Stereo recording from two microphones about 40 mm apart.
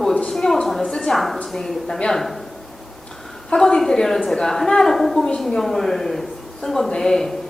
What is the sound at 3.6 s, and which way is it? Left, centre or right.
Speech, centre.